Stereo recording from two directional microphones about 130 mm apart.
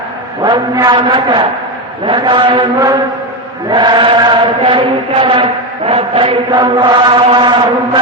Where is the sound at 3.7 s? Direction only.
35° right (ahead or behind).